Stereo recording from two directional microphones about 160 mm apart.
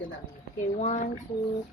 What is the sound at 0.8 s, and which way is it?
Speech, 50° left (ahead or behind).